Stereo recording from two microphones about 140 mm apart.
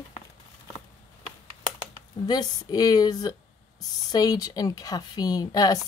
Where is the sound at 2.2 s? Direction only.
30° left (ahead or behind).